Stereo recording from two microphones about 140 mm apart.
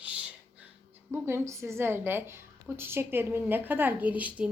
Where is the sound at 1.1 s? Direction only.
20° right (ahead or behind).